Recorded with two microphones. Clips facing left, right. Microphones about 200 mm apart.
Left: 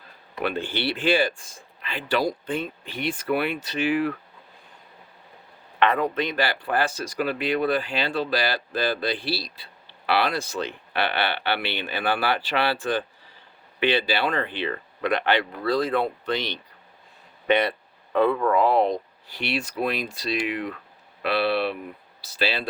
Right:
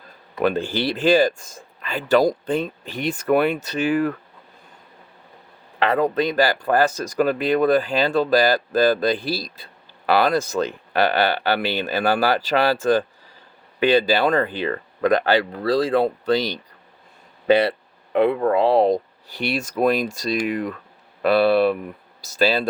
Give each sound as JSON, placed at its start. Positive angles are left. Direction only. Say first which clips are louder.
{"t": 0.4, "sound": "speech", "louder": "right 6 dB", "side_deg": -40}
{"t": 5.8, "sound": "speech", "louder": "right 3 dB", "side_deg": -35}
{"t": 17.4, "sound": "a sound", "louder": "right 5 dB", "side_deg": -30}
{"t": 18.3, "sound": "speech", "louder": "right 3 dB", "side_deg": -35}